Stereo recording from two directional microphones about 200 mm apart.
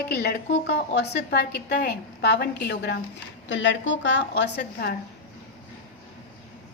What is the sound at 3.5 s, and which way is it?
A woman's voice, 65° left (ahead or behind).